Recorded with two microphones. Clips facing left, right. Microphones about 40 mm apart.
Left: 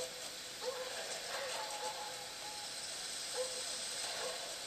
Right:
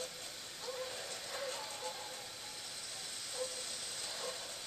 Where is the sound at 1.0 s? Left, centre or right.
Centre.